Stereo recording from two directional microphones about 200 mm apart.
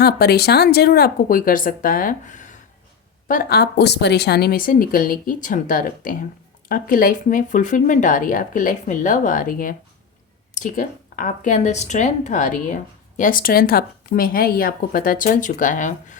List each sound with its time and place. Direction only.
0.0 s a woman's voice: 55° left (ahead or behind)